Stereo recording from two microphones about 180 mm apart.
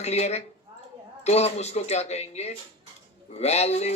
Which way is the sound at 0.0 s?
35° left (ahead or behind).